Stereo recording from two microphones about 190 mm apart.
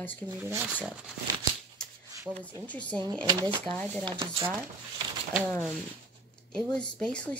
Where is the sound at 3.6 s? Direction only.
5° left (ahead or behind).